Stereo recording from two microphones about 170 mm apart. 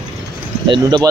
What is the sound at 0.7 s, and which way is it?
Speech, 25° right (ahead or behind).